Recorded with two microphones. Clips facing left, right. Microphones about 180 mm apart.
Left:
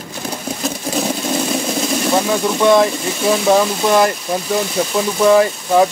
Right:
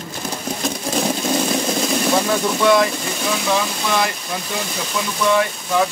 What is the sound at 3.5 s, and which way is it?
Speech, 45° left (ahead or behind).